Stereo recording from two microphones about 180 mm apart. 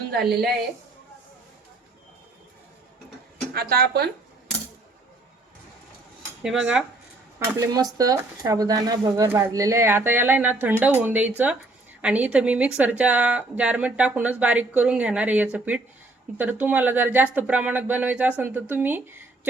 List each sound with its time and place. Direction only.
0.1 s speech: 65° right (ahead or behind)
3.5 s speech: 60° right (ahead or behind)
6.4 s speech: 5° right (ahead or behind)
7.3 s speech: 15° right (ahead or behind)